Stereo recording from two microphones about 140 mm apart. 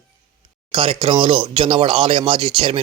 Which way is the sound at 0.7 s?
40° right (ahead or behind).